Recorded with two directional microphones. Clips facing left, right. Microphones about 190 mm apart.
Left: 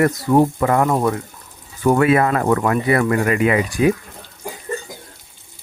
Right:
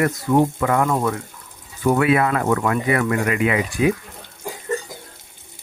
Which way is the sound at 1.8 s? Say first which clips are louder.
Left 2 dB; 40° left (ahead or behind).